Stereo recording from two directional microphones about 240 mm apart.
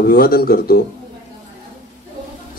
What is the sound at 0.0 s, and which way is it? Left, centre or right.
Speech, left.